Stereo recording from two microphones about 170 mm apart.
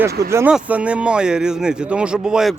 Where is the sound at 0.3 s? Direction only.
15° right (ahead or behind).